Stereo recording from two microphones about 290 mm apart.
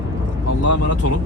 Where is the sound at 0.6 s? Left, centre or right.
Left.